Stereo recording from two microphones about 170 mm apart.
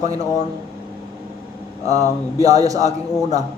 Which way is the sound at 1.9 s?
20° right (ahead or behind).